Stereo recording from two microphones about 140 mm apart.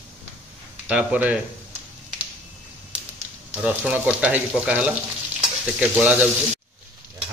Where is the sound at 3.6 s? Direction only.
10° right (ahead or behind).